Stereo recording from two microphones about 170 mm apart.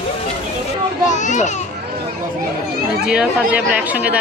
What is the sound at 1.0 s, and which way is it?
Speech, 45° left (ahead or behind).